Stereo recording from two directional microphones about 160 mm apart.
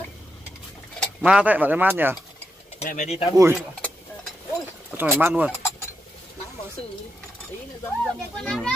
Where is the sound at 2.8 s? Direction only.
50° left (ahead or behind).